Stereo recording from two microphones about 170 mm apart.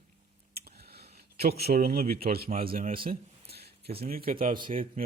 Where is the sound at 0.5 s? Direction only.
70° right (ahead or behind).